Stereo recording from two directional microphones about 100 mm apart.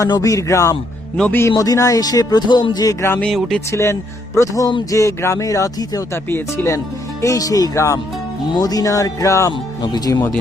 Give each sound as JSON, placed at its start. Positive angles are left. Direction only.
{"t": 0.0, "sound": "speech", "side_deg": 35}
{"t": 1.5, "sound": "speech", "side_deg": 35}
{"t": 3.2, "sound": "speech", "side_deg": 5}
{"t": 3.7, "sound": "speech", "side_deg": 30}
{"t": 6.2, "sound": "speech", "side_deg": 20}
{"t": 6.7, "sound": "speech", "side_deg": 30}
{"t": 9.5, "sound": "speech", "side_deg": 50}